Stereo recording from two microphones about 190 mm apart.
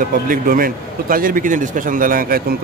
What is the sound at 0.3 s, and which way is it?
A man's voice, 45° right (ahead or behind).